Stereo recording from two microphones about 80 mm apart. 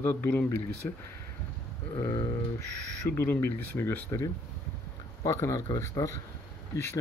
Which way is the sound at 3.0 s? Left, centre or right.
Left.